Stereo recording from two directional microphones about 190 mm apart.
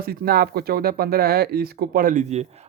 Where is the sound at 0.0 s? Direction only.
55° right (ahead or behind).